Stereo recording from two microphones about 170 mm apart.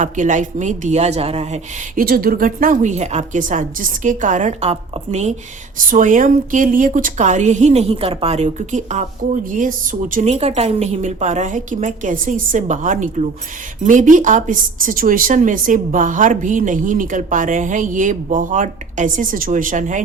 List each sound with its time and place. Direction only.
0.0 s speech: 45° right (ahead or behind)
2.0 s speech: 60° right (ahead or behind); by 5.3 s 40° right (ahead or behind)
5.7 s speech: 50° right (ahead or behind)